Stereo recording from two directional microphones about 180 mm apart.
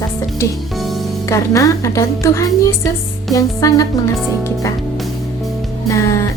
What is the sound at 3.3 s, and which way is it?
Music, 20° left (ahead or behind).